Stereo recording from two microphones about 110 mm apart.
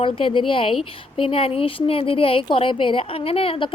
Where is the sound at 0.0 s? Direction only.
50° left (ahead or behind).